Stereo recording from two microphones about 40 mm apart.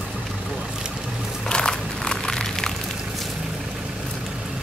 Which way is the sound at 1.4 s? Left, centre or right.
Centre.